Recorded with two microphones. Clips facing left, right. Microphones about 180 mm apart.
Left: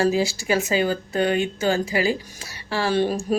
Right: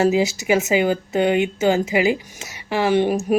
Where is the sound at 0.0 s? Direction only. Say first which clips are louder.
Right 3 dB; 20° right (ahead or behind).